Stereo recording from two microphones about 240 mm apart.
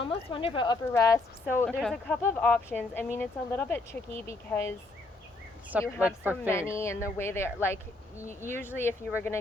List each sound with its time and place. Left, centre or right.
0.0 s speech: left
6.0 s speech: centre
6.5 s speech: centre